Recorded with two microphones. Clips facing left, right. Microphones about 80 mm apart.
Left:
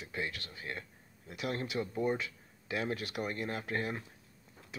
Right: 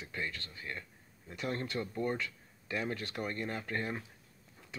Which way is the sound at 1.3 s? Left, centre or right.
Centre.